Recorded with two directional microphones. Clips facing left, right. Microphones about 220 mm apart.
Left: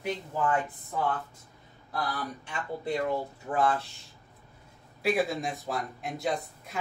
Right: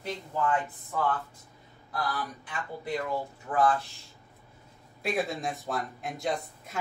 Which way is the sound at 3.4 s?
25° left (ahead or behind).